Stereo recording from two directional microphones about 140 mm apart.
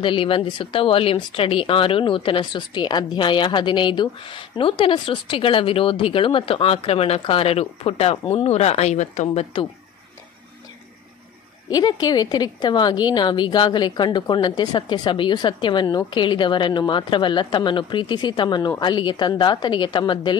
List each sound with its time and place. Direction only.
0.0 s speech: 40° left (ahead or behind)
11.7 s speech: 30° left (ahead or behind)